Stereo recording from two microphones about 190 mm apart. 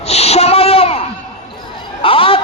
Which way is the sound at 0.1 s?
35° left (ahead or behind).